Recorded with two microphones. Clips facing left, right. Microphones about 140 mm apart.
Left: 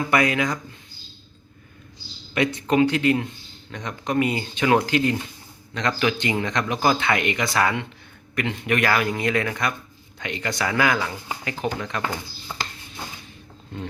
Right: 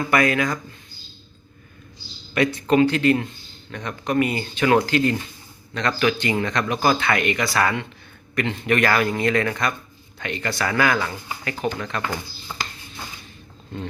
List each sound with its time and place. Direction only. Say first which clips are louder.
0.0 s speech: right 1 dB; 20° left (ahead or behind)
2.3 s speech: right 2 dB; 20° left (ahead or behind)